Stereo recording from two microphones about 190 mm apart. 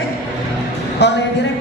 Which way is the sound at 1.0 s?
60° left (ahead or behind).